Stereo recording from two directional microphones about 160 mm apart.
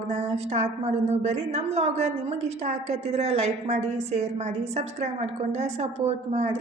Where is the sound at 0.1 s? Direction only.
45° right (ahead or behind).